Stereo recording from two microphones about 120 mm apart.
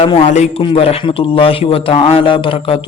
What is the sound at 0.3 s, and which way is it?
Speech, 75° left (ahead or behind).